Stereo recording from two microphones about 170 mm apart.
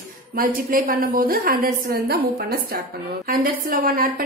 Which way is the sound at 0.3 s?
55° right (ahead or behind).